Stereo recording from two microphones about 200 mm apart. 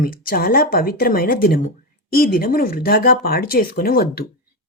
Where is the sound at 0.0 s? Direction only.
45° left (ahead or behind).